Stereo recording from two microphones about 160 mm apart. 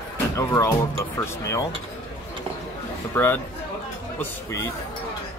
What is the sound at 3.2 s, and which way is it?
Speech, 10° left (ahead or behind).